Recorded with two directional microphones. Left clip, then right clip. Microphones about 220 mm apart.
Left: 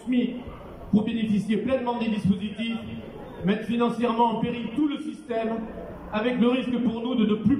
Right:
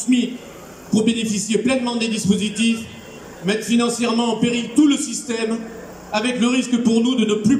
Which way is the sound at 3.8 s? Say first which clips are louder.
Right 2 dB; 50° right (ahead or behind).